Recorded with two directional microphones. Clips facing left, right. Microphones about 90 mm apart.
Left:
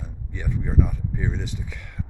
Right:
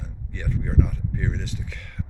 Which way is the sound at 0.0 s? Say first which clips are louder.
Even; 10° left (ahead or behind).